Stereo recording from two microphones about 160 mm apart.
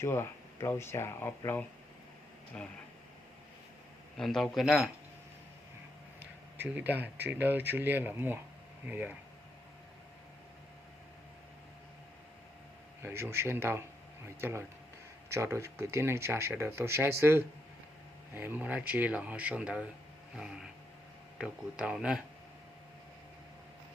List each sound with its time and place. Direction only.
0.0 s speech: 15° left (ahead or behind)
4.2 s speech: centre (ahead or behind)
6.6 s speech: 10° right (ahead or behind)
13.0 s speech: 15° right (ahead or behind)
15.3 s speech: 15° right (ahead or behind)